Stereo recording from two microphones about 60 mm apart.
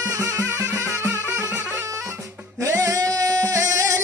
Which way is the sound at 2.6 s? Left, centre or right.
Right.